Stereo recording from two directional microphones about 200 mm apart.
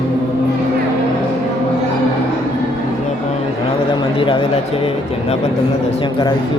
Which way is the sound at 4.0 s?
25° left (ahead or behind).